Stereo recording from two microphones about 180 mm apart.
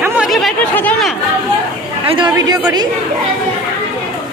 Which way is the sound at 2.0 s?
25° right (ahead or behind).